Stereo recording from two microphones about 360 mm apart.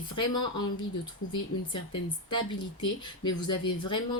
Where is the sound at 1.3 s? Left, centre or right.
Centre.